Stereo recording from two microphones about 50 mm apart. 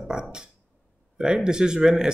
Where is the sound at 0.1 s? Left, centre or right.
Centre.